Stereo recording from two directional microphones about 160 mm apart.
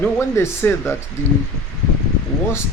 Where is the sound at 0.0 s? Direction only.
15° left (ahead or behind).